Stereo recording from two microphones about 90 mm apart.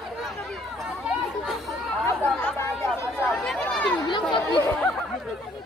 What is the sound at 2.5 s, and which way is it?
Chatter, 30° left (ahead or behind).